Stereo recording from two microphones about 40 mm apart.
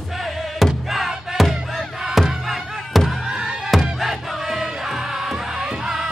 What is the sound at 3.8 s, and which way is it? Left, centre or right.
Crowd, centre.